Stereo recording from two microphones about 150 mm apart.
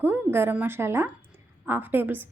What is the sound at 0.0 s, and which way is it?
A woman's voice, 15° right (ahead or behind).